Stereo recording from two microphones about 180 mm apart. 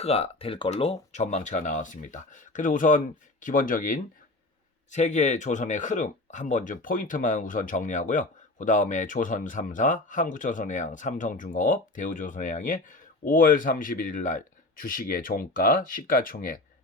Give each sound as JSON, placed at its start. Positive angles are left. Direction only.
{"t": 0.0, "sound": "speech", "side_deg": 35}